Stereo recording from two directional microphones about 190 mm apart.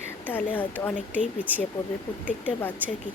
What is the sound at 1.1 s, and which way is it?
Speech, 10° right (ahead or behind).